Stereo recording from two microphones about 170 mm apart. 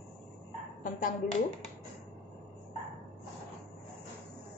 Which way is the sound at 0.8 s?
55° left (ahead or behind).